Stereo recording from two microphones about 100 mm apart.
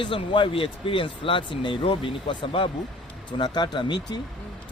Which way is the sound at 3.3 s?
50° left (ahead or behind).